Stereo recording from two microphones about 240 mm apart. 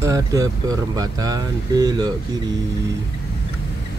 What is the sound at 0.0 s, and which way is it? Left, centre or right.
Speech, centre.